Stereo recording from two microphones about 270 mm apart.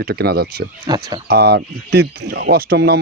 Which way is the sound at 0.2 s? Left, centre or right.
Right.